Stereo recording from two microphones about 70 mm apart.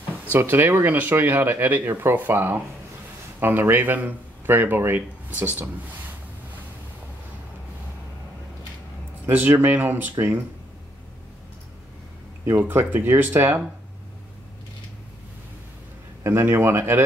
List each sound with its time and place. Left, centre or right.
0.3 s speech: right
9.3 s speech: right
12.4 s speech: right
16.3 s a man's voice: right